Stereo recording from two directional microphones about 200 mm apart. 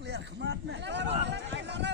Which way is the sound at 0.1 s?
60° right (ahead or behind).